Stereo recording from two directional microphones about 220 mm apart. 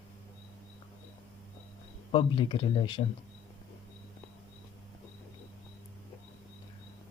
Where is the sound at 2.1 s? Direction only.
20° left (ahead or behind).